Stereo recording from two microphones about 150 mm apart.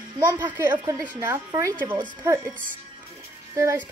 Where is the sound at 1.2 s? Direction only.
15° right (ahead or behind).